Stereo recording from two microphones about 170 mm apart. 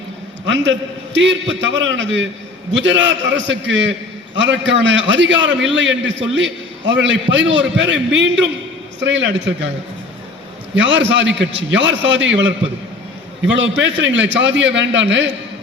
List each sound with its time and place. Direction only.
0.4 s a man's voice: 90° right
10.8 s a man's voice: 90° right